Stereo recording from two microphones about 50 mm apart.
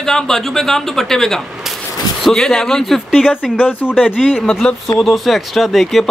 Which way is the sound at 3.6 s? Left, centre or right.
Left.